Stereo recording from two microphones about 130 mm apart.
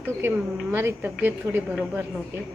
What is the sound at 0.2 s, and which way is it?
A woman's voice, 20° right (ahead or behind).